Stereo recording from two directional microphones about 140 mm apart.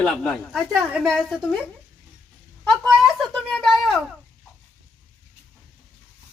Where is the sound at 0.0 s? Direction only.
5° left (ahead or behind).